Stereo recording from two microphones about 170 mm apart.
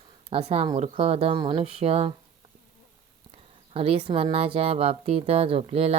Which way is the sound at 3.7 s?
35° right (ahead or behind).